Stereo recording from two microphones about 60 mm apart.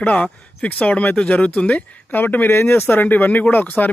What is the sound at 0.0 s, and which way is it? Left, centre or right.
Speech, left.